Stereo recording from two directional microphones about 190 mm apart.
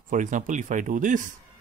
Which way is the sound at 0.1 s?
40° right (ahead or behind).